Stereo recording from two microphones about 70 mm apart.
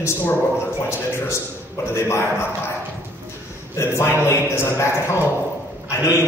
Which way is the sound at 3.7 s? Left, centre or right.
Left.